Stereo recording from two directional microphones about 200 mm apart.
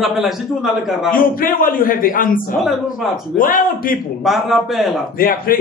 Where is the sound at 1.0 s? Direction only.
45° left (ahead or behind).